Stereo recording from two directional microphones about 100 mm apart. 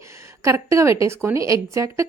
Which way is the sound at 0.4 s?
30° right (ahead or behind).